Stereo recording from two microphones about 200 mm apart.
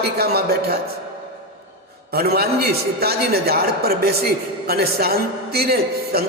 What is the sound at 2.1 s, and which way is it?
A man's voice, 50° right (ahead or behind).